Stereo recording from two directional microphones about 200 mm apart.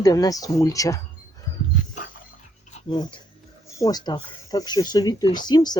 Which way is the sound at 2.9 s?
20° left (ahead or behind).